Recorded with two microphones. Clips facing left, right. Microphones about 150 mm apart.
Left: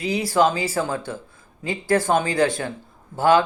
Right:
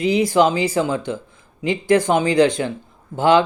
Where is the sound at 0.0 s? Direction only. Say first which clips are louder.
Right 4 dB; 20° right (ahead or behind).